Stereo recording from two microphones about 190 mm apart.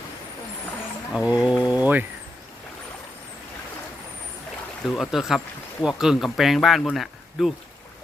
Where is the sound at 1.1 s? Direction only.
5° right (ahead or behind).